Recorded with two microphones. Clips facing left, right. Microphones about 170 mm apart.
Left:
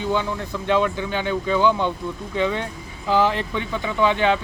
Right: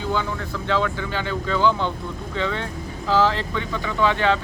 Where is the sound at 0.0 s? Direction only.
20° left (ahead or behind).